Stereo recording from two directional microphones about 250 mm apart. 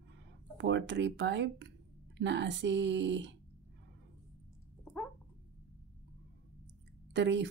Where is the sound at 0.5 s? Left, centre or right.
Right.